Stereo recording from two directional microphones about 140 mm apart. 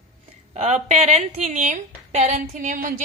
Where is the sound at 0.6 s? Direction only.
55° right (ahead or behind).